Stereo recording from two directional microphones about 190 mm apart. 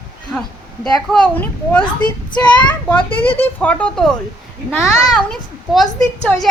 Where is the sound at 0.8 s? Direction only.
5° left (ahead or behind).